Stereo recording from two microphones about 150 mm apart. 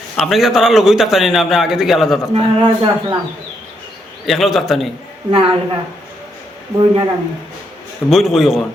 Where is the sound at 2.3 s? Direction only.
35° right (ahead or behind).